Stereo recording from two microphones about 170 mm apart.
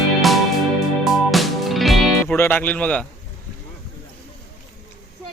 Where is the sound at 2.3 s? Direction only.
10° left (ahead or behind).